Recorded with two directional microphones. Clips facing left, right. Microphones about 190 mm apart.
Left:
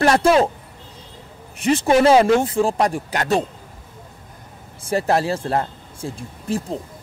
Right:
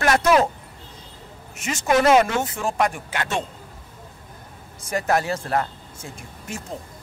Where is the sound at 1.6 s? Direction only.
35° left (ahead or behind).